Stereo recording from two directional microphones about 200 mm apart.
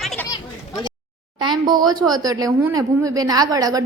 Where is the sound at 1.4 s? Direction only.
20° right (ahead or behind).